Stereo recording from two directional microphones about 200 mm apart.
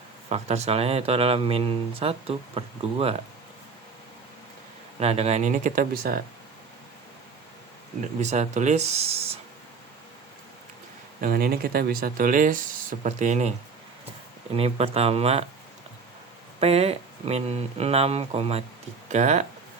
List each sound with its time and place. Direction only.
0.3 s speech: 30° right (ahead or behind)
4.9 s speech: 30° right (ahead or behind); by 6.2 s 45° right (ahead or behind)
8.2 s speech: 35° right (ahead or behind)
11.2 s speech: 45° right (ahead or behind)
14.5 s speech: 30° right (ahead or behind)
16.6 s speech: 30° right (ahead or behind)